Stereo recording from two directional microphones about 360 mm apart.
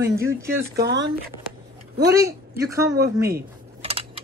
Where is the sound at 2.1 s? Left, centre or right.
Centre.